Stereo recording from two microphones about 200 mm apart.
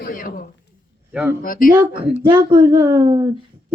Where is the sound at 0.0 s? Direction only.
45° left (ahead or behind).